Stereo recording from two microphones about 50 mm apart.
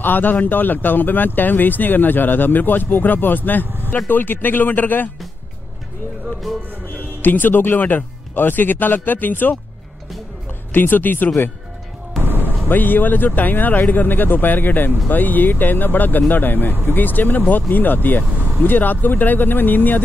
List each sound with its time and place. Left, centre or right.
0.0 s speech: left
3.6 s vehicle: right
3.9 s speech: left
6.9 s speech: left
10.7 s speech: left
12.2 s a sound: right
12.6 s speech: left